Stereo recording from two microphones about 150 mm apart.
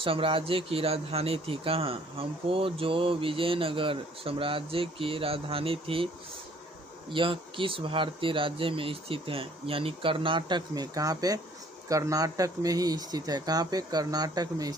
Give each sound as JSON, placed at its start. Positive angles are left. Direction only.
{"t": 0.0, "sound": "speech", "side_deg": -35}
{"t": 7.1, "sound": "speech", "side_deg": -35}